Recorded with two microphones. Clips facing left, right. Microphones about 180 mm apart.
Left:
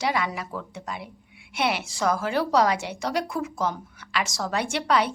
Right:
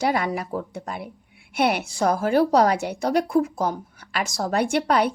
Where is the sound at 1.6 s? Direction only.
55° right (ahead or behind).